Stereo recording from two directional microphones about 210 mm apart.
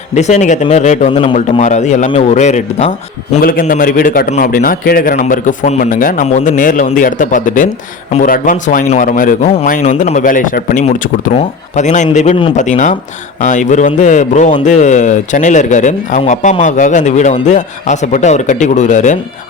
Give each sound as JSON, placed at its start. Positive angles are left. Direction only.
{"t": 0.1, "sound": "speech", "side_deg": 35}